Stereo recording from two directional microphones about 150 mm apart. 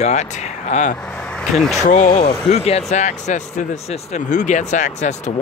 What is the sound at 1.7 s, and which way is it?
Speech, 50° left (ahead or behind).